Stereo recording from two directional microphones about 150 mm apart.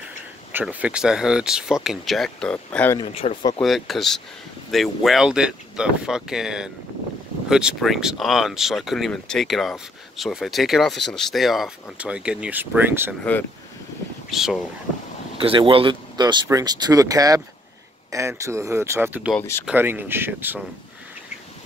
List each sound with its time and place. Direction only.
0.5 s speech: 10° right (ahead or behind); by 3.0 s 10° left (ahead or behind)
3.1 s speech: 45° left (ahead or behind)
3.6 s speech: centre (ahead or behind)
13.2 s speech: 10° left (ahead or behind)
14.3 s speech: centre (ahead or behind)
15.4 s speech: 35° right (ahead or behind); by 20.6 s 15° right (ahead or behind)